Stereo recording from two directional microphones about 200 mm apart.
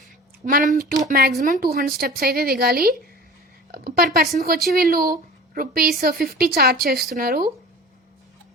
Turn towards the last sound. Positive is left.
turn(degrees=-50)  # may be behind; listen again after turning